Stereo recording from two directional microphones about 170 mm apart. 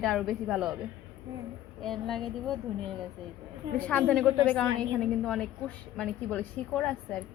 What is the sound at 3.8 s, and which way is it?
A woman's voice, 10° left (ahead or behind).